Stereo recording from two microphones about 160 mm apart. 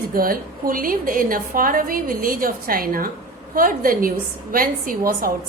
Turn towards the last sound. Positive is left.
turn(degrees=-65)  # may be behind; listen again after turning